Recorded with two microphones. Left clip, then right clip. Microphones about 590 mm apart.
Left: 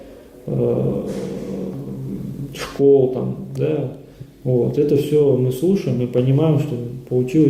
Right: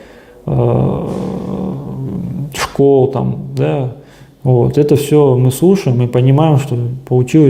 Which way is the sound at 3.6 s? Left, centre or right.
Right.